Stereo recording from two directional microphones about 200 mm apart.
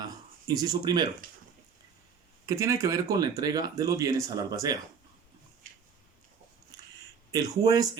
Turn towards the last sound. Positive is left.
turn(degrees=-20)  # may be behind; listen again after turning